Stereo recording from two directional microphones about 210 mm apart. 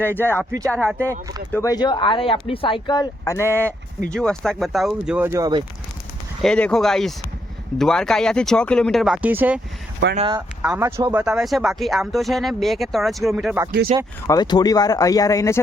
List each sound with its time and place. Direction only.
0.0 s speech: 10° left (ahead or behind); by 5.6 s 20° right (ahead or behind)
6.4 s speech: 5° left (ahead or behind)
10.0 s speech: 55° right (ahead or behind)
10.3 s speech: 10° right (ahead or behind)
13.9 s speech: 25° right (ahead or behind)
14.3 s speech: 20° left (ahead or behind)